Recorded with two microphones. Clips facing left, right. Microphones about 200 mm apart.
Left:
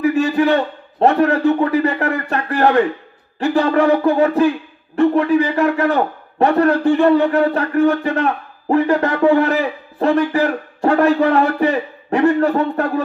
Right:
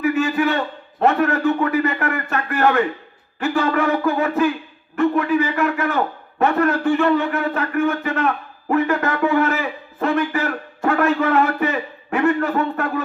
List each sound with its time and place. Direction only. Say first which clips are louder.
0.0 s a man's voice: left 4 dB; 35° left (ahead or behind)